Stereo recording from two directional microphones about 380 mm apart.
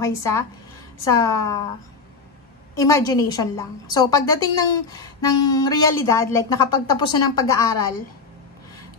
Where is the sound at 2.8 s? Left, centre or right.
Centre.